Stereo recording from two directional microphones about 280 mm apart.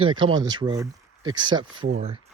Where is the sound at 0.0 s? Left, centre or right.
Centre.